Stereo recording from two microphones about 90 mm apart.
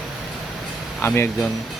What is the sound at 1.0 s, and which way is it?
Speech, 25° left (ahead or behind).